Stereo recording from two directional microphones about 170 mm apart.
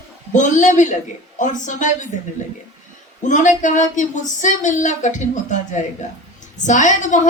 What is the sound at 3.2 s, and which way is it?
Speech, 45° left (ahead or behind).